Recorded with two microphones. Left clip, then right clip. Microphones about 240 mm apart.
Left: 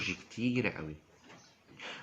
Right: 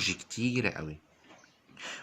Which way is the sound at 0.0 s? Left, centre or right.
Right.